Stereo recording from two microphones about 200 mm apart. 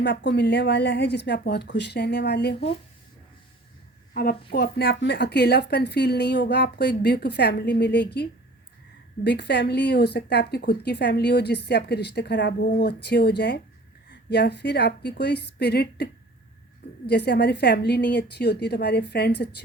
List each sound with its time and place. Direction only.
0.0 s a woman's voice: 60° left (ahead or behind)
4.1 s a woman's voice: 50° left (ahead or behind)
17.1 s a woman's voice: 55° left (ahead or behind)